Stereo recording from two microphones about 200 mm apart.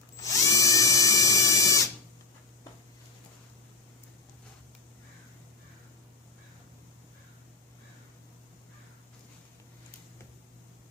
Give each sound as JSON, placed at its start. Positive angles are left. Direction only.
{"t": 0.2, "sound": "drill", "side_deg": 15}